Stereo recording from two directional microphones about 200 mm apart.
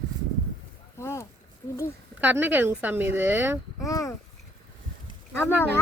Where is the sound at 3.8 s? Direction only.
15° left (ahead or behind).